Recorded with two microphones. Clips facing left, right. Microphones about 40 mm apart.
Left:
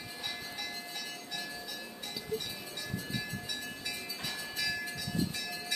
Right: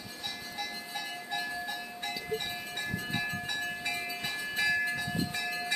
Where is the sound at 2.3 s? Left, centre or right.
Right.